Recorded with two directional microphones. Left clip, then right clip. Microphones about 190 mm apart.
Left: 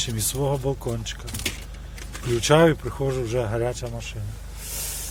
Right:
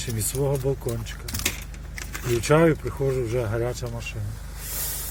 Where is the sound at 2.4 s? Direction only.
25° left (ahead or behind); by 4.1 s 5° left (ahead or behind).